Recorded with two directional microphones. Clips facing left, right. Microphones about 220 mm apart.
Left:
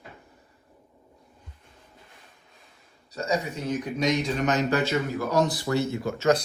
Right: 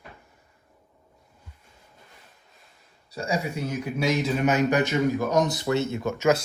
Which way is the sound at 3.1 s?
10° right (ahead or behind).